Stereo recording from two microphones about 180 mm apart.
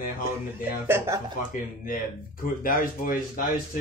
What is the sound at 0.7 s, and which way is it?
Speech, 10° right (ahead or behind).